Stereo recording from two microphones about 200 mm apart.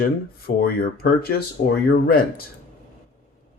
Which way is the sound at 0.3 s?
50° left (ahead or behind).